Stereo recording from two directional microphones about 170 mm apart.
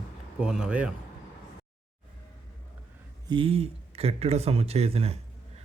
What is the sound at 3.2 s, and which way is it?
Speech, 30° right (ahead or behind).